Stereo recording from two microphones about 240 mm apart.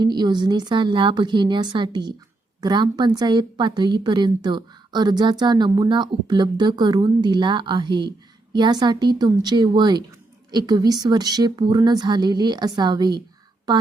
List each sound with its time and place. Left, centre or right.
0.0 s a woman's voice: centre